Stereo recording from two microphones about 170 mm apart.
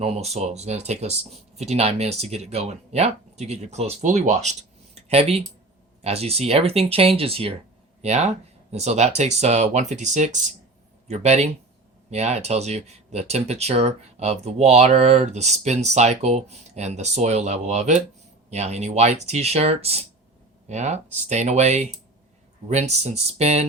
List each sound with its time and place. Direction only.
0.0 s speech: 40° right (ahead or behind)
4.9 s a sound: 35° right (ahead or behind)
6.0 s speech: 35° right (ahead or behind)